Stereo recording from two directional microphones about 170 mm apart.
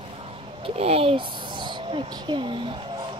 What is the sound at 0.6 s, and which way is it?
Speech, 35° right (ahead or behind).